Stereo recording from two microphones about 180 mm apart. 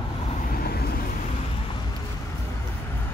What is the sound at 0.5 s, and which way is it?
Vehicle, 60° left (ahead or behind).